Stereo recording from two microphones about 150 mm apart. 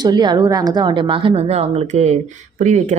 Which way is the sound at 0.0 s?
30° right (ahead or behind).